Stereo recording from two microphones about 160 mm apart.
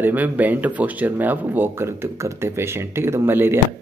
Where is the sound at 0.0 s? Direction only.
10° right (ahead or behind).